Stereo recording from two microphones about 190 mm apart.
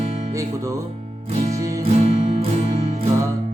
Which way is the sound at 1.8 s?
35° right (ahead or behind).